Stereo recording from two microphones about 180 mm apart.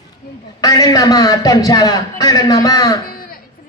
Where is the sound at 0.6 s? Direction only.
20° left (ahead or behind).